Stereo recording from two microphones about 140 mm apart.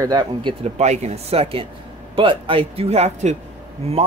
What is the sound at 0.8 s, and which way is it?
A man's voice, 55° right (ahead or behind).